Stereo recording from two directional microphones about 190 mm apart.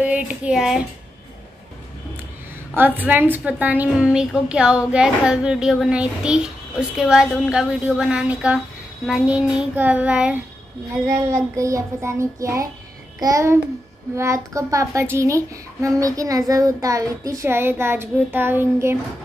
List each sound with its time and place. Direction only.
0.0 s a woman's voice: 5° right (ahead or behind)
2.7 s a woman's voice: 10° right (ahead or behind)